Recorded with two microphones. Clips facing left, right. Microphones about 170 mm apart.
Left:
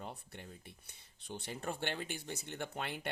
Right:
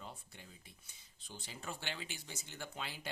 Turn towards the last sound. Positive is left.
turn(degrees=60)  # may be behind; listen again after turning